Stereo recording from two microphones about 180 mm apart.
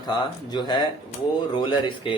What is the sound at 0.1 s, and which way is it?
A man's voice, 25° left (ahead or behind).